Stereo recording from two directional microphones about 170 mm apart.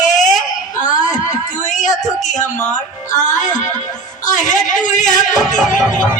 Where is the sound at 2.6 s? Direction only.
10° left (ahead or behind).